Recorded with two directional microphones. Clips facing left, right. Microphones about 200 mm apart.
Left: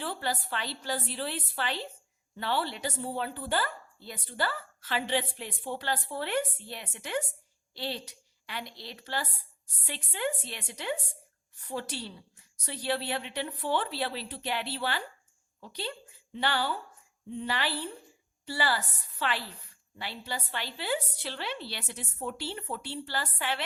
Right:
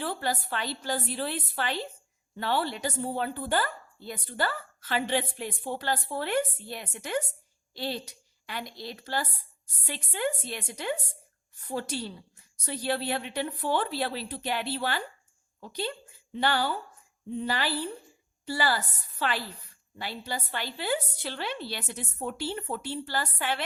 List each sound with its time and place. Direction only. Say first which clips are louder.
0.0 s a woman's voice: right 3 dB; 45° right (ahead or behind)